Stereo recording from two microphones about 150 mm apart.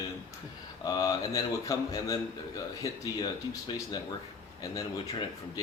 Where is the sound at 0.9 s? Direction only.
25° left (ahead or behind).